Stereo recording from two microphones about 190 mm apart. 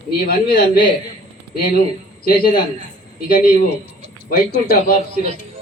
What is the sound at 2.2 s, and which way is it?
Music, 50° left (ahead or behind).